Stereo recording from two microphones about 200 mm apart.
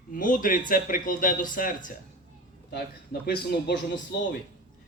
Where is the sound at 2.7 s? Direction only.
55° left (ahead or behind).